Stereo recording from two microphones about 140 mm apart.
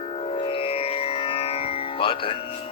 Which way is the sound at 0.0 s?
45° left (ahead or behind).